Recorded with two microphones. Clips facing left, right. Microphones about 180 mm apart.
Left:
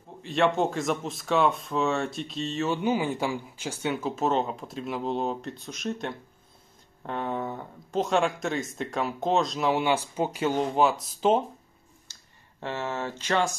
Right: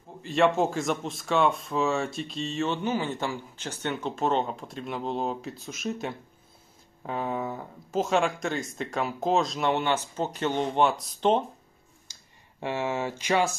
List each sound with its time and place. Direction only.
0.2 s speech: centre (ahead or behind)
2.8 s speech: 15° left (ahead or behind)
12.1 s speech: 10° right (ahead or behind)